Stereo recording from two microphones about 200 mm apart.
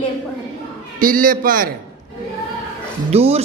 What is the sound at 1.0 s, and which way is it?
Speech, 45° right (ahead or behind).